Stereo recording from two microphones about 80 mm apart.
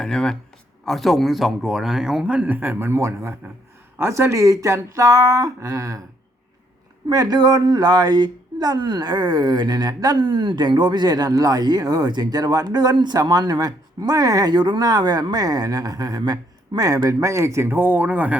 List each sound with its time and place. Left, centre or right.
0.0 s speech: centre; by 6.0 s right
7.1 s speech: right; by 18.3 s centre